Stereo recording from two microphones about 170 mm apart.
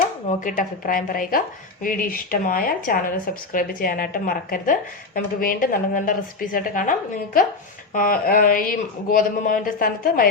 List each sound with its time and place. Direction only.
0.3 s a woman's voice: 50° left (ahead or behind)
7.9 s a woman's voice: 55° left (ahead or behind)